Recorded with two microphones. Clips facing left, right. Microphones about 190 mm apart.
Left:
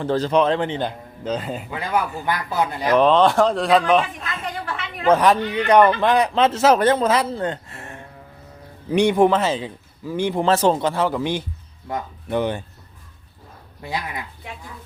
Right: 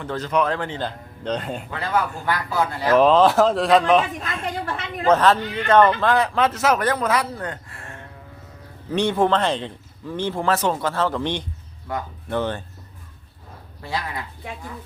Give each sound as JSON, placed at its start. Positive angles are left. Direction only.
{"t": 0.0, "sound": "a man's voice", "side_deg": 30}
{"t": 1.2, "sound": "speech", "side_deg": 0}
{"t": 2.9, "sound": "a man's voice", "side_deg": 0}
{"t": 5.0, "sound": "a man's voice", "side_deg": 10}
{"t": 11.9, "sound": "a man's voice", "side_deg": 25}
{"t": 12.3, "sound": "speech", "side_deg": 15}
{"t": 13.8, "sound": "speech", "side_deg": 20}